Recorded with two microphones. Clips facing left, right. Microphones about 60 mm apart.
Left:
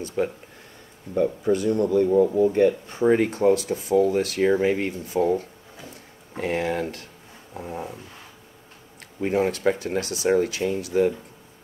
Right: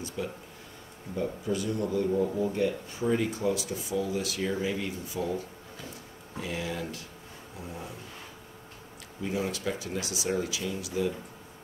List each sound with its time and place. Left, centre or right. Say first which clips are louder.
0.0 s speech: left 9 dB; left
9.2 s speech: left 10 dB; left